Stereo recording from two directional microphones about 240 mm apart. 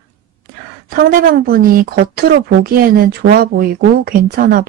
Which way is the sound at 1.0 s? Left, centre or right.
Right.